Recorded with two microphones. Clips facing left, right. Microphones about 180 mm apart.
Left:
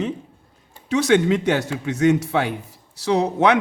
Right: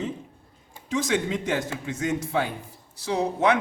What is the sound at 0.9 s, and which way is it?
A man's voice, 70° left (ahead or behind).